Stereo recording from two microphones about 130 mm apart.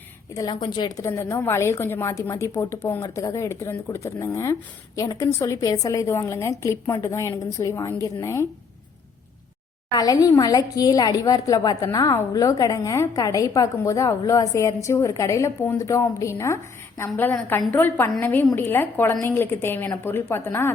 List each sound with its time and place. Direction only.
0.6 s speech: 30° left (ahead or behind)
9.9 s a woman's voice: 30° left (ahead or behind)